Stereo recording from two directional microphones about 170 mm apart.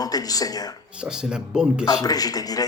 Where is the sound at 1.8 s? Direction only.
20° left (ahead or behind).